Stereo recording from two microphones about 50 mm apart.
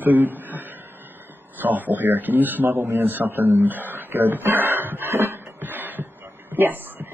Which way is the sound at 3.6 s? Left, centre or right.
Right.